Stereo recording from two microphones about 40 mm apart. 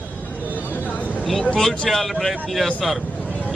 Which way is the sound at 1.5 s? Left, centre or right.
Centre.